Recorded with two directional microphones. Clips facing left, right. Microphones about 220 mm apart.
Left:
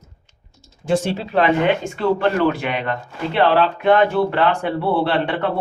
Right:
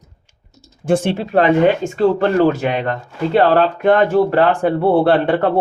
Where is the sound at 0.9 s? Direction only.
50° right (ahead or behind).